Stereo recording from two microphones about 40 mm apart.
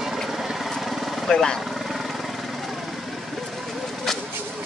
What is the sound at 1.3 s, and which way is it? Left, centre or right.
Speech, centre.